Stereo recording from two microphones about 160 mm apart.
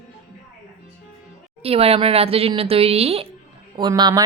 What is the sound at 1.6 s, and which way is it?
Speech, 40° right (ahead or behind).